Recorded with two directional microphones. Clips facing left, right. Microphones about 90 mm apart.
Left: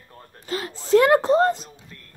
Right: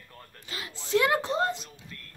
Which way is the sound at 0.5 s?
40° left (ahead or behind).